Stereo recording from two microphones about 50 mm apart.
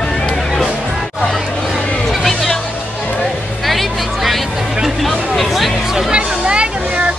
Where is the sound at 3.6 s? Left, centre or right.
Centre.